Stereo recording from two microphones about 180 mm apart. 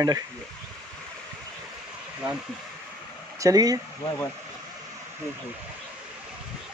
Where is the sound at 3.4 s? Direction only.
20° right (ahead or behind).